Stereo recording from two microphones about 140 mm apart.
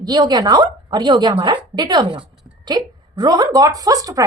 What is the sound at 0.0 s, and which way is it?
A woman's voice, 30° right (ahead or behind).